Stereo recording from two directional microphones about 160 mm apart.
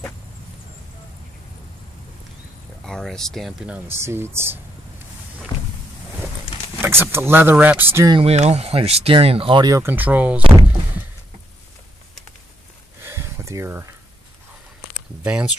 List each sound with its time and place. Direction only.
2.8 s speech: 5° left (ahead or behind); by 4.6 s 15° right (ahead or behind)
6.8 s speech: 15° right (ahead or behind)
8.1 s speech: 40° right (ahead or behind)
9.7 s speech: 15° right (ahead or behind)
13.0 s a sound: 15° right (ahead or behind)
15.2 s speech: 5° right (ahead or behind)